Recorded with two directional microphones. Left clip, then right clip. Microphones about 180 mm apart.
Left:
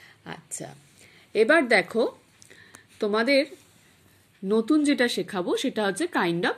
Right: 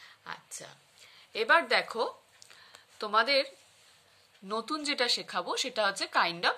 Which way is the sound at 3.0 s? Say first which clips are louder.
Left 4 dB; 10° left (ahead or behind).